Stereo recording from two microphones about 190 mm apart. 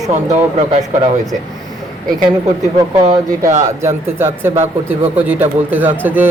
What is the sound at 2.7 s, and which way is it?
Speech, 20° right (ahead or behind).